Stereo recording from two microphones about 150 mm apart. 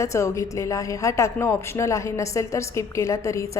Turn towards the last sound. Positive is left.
turn(degrees=20)  # may be behind; listen again after turning